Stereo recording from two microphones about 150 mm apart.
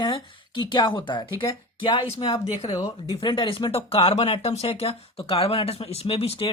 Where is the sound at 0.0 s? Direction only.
35° left (ahead or behind).